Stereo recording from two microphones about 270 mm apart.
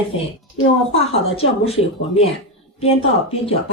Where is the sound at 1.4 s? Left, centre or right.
Left.